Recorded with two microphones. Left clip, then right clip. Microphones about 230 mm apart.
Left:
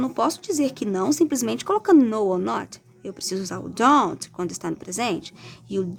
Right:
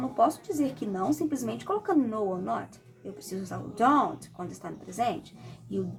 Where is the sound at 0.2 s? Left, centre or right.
Left.